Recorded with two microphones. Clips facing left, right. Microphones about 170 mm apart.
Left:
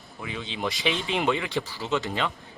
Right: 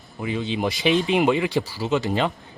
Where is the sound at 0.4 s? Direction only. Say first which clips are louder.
Right 5 dB; 15° right (ahead or behind).